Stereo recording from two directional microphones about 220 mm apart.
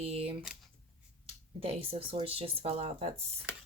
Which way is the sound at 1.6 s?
25° right (ahead or behind).